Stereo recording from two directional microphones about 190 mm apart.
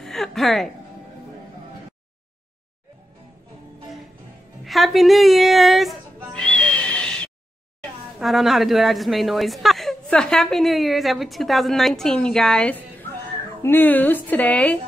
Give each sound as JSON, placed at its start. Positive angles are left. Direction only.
{"t": 0.0, "sound": "music", "side_deg": 0}
{"t": 4.6, "sound": "a sound", "side_deg": 0}
{"t": 8.2, "sound": "a woman's voice", "side_deg": 0}